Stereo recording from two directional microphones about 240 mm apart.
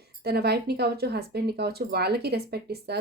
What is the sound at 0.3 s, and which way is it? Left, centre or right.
Speech, right.